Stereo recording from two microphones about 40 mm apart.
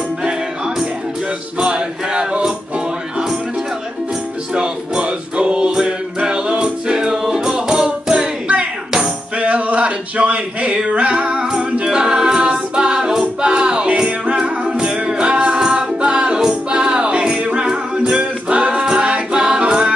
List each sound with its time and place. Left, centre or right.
0.2 s music: centre
4.6 s music: right
9.4 s music: right
11.2 s a capella: centre
15.0 s music: right
17.4 s a capella: right
17.6 s music: right